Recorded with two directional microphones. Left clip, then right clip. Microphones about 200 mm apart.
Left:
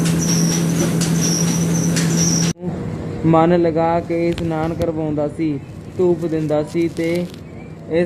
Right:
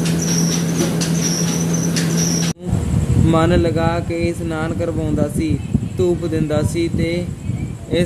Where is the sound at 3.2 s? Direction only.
25° right (ahead or behind).